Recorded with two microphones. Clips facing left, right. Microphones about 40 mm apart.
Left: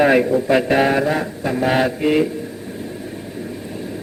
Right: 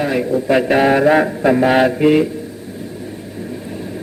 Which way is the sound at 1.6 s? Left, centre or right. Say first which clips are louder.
Right 2 dB; centre.